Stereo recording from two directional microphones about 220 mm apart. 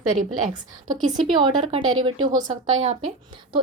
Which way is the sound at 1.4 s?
25° right (ahead or behind).